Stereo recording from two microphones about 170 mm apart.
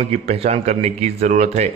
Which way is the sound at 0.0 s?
35° right (ahead or behind).